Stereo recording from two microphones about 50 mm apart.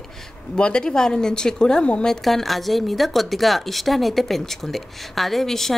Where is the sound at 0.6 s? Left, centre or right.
Centre.